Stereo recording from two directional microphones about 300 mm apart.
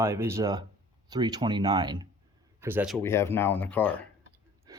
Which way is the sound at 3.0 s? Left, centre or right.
Centre.